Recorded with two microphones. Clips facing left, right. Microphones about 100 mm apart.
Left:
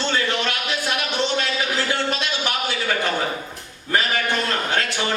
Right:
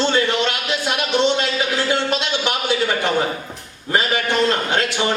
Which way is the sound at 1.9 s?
20° right (ahead or behind).